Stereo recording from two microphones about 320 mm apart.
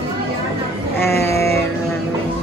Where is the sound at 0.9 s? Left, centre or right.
Centre.